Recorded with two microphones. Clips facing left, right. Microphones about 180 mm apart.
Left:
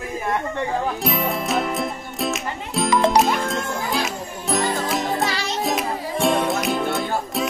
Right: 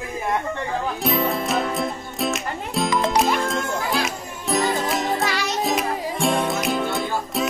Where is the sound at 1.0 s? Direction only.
Centre (ahead or behind).